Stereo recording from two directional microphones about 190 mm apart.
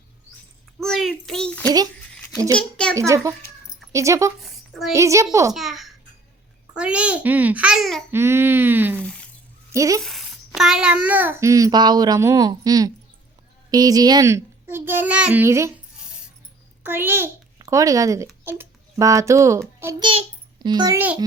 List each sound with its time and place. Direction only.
0.8 s a child's voice: centre (ahead or behind)
3.9 s a child's voice: 15° right (ahead or behind)
5.5 s a child's voice: centre (ahead or behind)
8.1 s a child's voice: 10° right (ahead or behind)
9.0 s a sound: 5° left (ahead or behind)
9.7 s a child's voice: 15° right (ahead or behind)
10.0 s a child's voice: centre (ahead or behind)
16.8 s a child's voice: 10° right (ahead or behind)